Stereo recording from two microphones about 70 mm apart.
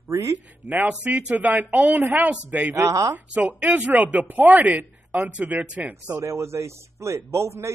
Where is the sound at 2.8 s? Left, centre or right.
Right.